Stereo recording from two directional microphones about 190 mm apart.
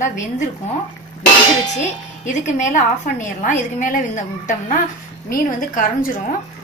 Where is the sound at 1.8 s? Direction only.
40° left (ahead or behind).